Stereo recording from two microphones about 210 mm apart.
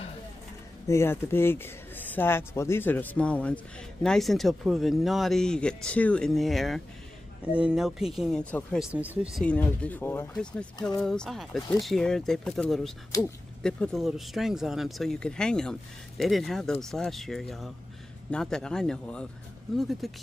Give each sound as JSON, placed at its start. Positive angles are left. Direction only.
{"t": 0.8, "sound": "speech", "side_deg": 10}